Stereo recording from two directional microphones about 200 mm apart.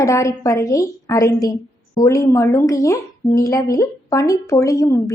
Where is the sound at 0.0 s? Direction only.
15° left (ahead or behind).